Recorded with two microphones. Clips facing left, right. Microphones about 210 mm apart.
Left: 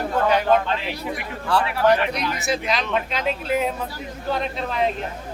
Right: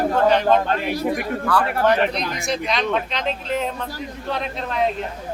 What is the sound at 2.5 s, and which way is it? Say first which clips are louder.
Speech: right 2 dB; centre (ahead or behind).